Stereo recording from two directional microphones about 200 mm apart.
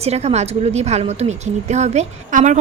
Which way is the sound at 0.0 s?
30° right (ahead or behind).